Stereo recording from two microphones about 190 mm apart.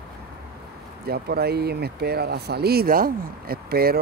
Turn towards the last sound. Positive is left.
turn(degrees=-55)  # may be behind; listen again after turning